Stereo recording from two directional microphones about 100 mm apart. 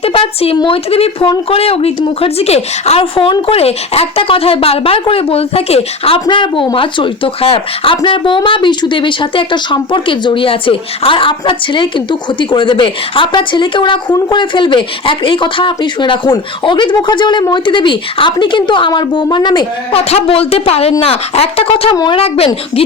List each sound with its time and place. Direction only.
0.0 s a sound: 75° left (ahead or behind)
0.5 s speech: 50° left (ahead or behind)
0.9 s a woman's voice: 75° left (ahead or behind)
6.2 s speech: 55° left (ahead or behind)
19.9 s speech: 80° left
21.0 s a woman's voice: 75° left (ahead or behind)